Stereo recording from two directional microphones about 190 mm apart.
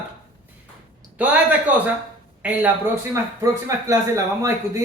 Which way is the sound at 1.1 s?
10° right (ahead or behind).